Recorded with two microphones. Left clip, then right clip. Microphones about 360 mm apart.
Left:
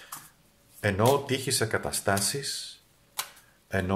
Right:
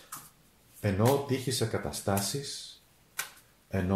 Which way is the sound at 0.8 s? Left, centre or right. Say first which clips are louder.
Left 4 dB; left.